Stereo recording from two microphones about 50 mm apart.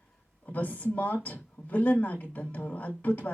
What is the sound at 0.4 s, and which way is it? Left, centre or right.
Speech, left.